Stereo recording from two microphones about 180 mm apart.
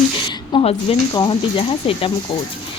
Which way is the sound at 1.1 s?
25° left (ahead or behind).